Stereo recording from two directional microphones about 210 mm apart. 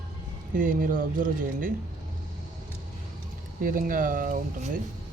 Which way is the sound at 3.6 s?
40° right (ahead or behind).